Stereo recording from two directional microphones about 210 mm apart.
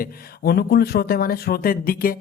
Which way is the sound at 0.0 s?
50° left (ahead or behind).